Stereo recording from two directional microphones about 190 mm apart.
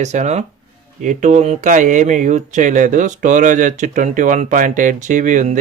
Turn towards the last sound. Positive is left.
turn(degrees=-40)  # may be behind; listen again after turning